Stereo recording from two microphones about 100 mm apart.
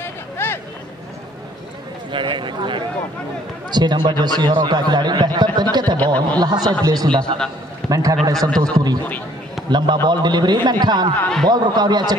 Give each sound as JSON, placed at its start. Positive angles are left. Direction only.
{"t": 0.0, "sound": "a sound", "side_deg": 20}
{"t": 2.1, "sound": "speech", "side_deg": -55}
{"t": 8.4, "sound": "speech", "side_deg": 5}
{"t": 8.7, "sound": "speech", "side_deg": -40}
{"t": 11.1, "sound": "speech", "side_deg": 10}
{"t": 11.4, "sound": "speech", "side_deg": -45}